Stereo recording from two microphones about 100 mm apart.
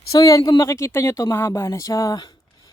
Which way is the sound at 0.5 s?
30° left (ahead or behind).